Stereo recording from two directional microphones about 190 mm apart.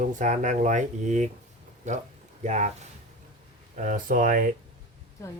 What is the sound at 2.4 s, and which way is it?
Speech, 40° right (ahead or behind).